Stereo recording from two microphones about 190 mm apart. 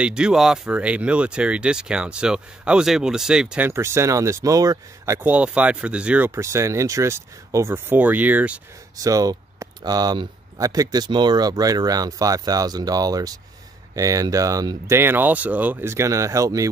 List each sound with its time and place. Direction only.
0.0 s speech: 5° right (ahead or behind)